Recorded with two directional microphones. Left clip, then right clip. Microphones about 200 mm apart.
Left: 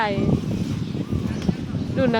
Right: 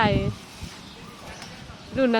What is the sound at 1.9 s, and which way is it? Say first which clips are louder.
Speech: even; centre (ahead or behind).